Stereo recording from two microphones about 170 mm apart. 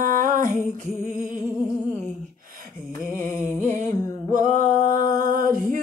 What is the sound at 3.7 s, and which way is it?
Music, 45° right (ahead or behind).